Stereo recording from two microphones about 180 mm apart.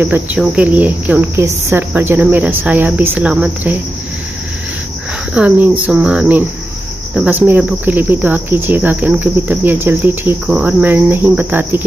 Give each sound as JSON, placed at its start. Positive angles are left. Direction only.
{"t": 0.0, "sound": "speech", "side_deg": -10}
{"t": 5.3, "sound": "speech", "side_deg": -10}